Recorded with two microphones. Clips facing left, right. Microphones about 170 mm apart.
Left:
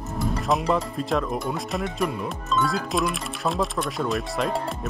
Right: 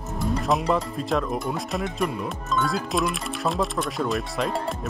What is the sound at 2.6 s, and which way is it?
Speech, centre (ahead or behind).